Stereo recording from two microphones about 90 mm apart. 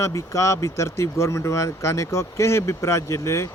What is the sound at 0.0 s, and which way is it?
Speech, 35° left (ahead or behind).